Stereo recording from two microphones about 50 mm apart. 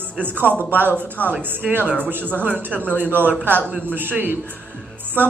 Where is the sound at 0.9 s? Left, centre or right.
Left.